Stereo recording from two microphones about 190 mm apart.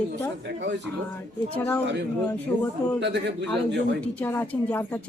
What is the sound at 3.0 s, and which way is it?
Speech, 65° right (ahead or behind).